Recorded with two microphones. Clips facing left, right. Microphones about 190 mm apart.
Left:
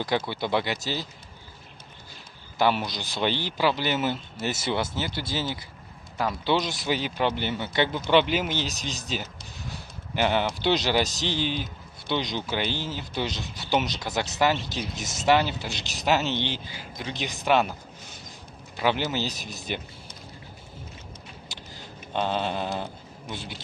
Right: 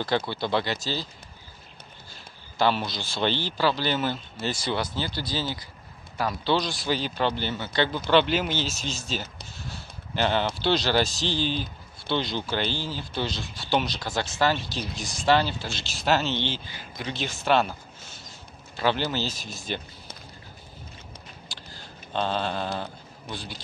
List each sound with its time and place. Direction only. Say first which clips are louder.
0.0 s speech: even; 15° left (ahead or behind)
2.6 s speech: even; 15° left (ahead or behind)
18.8 s speech: even; 15° left (ahead or behind)
22.1 s speech: even; 15° left (ahead or behind)